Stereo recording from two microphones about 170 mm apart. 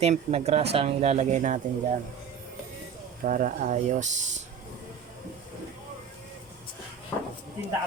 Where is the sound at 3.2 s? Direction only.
50° right (ahead or behind).